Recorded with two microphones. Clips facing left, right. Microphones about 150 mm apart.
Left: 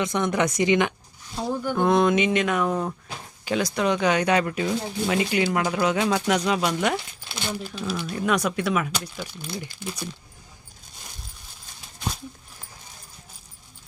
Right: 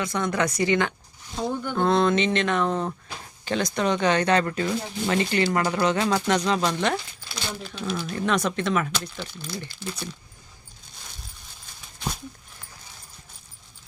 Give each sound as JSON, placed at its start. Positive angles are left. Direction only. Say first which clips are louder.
{"t": 0.0, "sound": "speech", "louder": "left 2 dB", "side_deg": 20}